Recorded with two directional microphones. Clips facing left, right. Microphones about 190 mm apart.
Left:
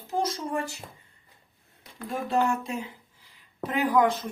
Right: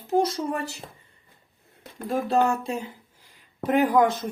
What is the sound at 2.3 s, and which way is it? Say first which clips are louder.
Speech: right 2 dB; 30° right (ahead or behind).